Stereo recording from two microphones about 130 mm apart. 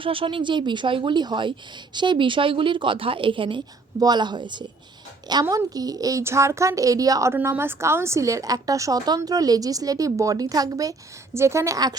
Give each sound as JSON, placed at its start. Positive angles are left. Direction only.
{"t": 0.0, "sound": "a woman's voice", "side_deg": -45}